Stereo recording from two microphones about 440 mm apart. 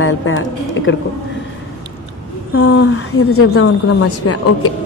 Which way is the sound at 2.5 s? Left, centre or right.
Left.